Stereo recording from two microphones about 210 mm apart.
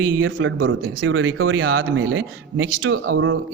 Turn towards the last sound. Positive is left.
turn(degrees=-65)  # may be behind; listen again after turning